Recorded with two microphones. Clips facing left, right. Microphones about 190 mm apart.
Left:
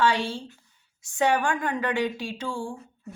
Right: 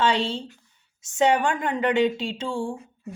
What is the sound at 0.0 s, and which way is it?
A woman's voice, 25° right (ahead or behind).